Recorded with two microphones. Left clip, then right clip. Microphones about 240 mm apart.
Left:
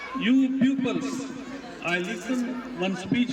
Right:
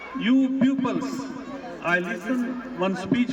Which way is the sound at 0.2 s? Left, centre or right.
Centre.